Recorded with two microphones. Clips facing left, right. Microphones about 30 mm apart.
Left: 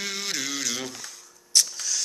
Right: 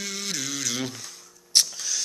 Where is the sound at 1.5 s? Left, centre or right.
Right.